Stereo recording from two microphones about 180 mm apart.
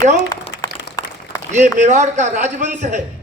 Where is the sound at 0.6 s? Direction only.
20° left (ahead or behind).